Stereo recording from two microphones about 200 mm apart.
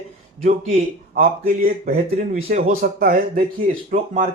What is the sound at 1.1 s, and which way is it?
Speech, 45° right (ahead or behind).